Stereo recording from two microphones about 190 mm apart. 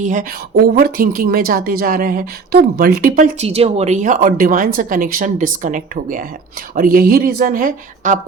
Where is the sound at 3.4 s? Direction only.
30° right (ahead or behind).